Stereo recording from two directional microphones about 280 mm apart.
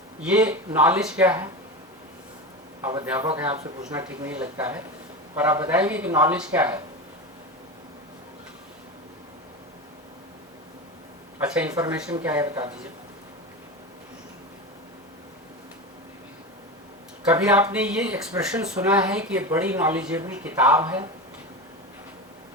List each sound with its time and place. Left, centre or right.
0.2 s speech: centre
2.8 s speech: centre
3.5 s speech: right
3.8 s speech: centre
11.3 s speech: centre
17.2 s speech: centre